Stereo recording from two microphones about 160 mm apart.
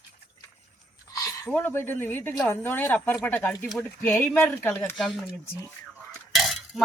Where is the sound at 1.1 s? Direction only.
20° left (ahead or behind).